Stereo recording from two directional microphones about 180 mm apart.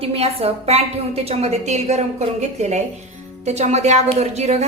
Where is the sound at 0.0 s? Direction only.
35° right (ahead or behind).